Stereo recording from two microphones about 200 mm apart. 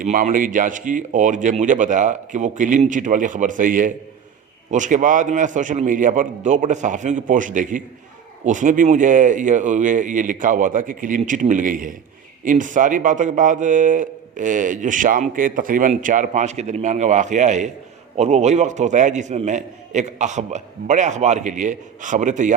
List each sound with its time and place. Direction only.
0.0 s a man's voice: 40° right (ahead or behind)